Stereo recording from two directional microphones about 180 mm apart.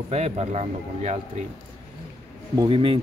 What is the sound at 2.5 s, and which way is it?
Speech, 30° right (ahead or behind).